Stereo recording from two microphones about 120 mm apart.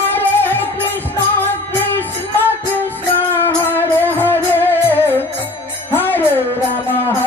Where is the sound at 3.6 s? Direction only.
15° left (ahead or behind).